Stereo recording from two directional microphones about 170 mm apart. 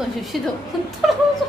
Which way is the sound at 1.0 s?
Centre (ahead or behind).